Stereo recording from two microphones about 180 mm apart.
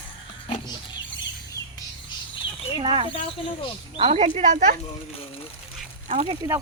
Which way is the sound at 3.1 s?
30° left (ahead or behind).